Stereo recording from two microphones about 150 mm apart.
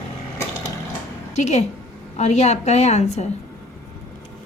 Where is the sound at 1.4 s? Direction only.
50° left (ahead or behind).